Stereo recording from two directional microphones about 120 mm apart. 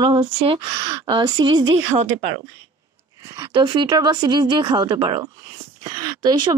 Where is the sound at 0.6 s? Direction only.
35° right (ahead or behind).